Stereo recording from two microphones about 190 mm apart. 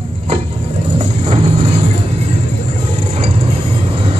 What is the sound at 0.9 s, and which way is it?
Vehicle, 30° right (ahead or behind).